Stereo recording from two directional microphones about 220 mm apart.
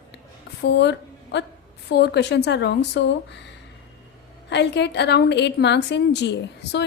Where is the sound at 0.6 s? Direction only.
50° left (ahead or behind).